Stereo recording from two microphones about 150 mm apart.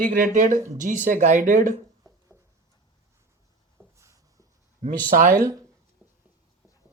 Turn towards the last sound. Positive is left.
turn(degrees=-65)  # may be behind; listen again after turning